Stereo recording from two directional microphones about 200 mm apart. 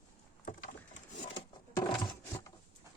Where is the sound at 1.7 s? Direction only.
20° left (ahead or behind).